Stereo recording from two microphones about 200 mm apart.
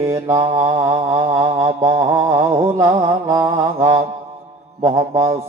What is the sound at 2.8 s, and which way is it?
Mantra, 15° right (ahead or behind).